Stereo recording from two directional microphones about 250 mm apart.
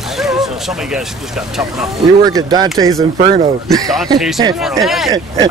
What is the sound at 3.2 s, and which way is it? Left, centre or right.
Speech, right.